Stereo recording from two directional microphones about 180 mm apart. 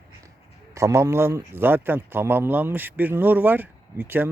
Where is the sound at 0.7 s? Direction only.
15° right (ahead or behind).